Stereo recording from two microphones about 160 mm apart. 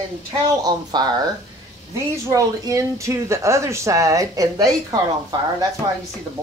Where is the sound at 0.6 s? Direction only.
25° right (ahead or behind).